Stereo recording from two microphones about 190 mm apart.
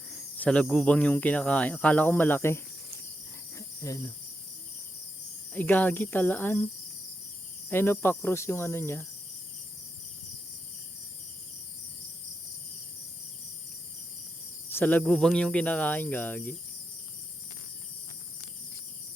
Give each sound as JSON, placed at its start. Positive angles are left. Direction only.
{"t": 0.1, "sound": "speech", "side_deg": 5}
{"t": 3.8, "sound": "speech", "side_deg": 15}
{"t": 5.5, "sound": "speech", "side_deg": 10}
{"t": 7.7, "sound": "speech", "side_deg": 10}
{"t": 14.7, "sound": "speech", "side_deg": 10}